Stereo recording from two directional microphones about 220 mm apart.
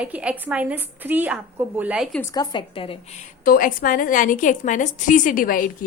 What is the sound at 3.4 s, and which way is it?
A woman's voice, 40° left (ahead or behind).